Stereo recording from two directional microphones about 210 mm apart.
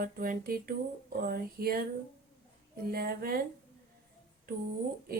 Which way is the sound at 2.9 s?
45° right (ahead or behind).